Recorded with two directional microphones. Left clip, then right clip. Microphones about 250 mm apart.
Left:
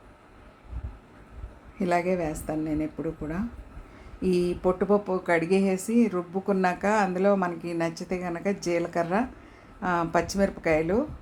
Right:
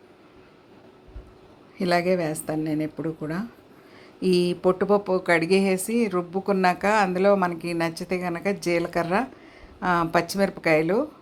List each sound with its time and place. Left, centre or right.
1.8 s speech: centre